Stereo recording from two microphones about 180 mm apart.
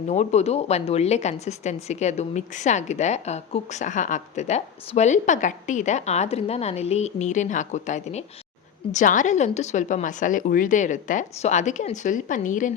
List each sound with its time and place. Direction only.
0.1 s a woman's voice: 40° left (ahead or behind)